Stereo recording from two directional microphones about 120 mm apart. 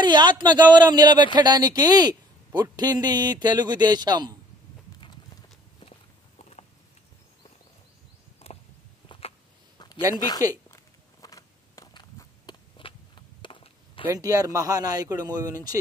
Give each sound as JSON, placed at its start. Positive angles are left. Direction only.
{"t": 0.0, "sound": "speech", "side_deg": -40}
{"t": 5.8, "sound": "walk", "side_deg": 60}
{"t": 8.4, "sound": "a sound", "side_deg": 60}
{"t": 10.1, "sound": "speech", "side_deg": 35}
{"t": 10.7, "sound": "a sound", "side_deg": 30}
{"t": 14.1, "sound": "speech", "side_deg": -30}